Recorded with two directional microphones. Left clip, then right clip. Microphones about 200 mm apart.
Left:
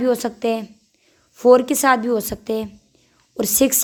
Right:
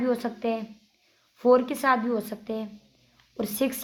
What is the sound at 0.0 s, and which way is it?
A woman's voice, 40° left (ahead or behind).